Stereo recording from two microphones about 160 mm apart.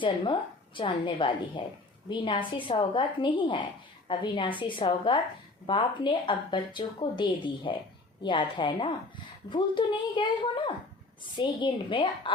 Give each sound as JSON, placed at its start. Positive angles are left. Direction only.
{"t": 0.8, "sound": "a woman's voice", "side_deg": 30}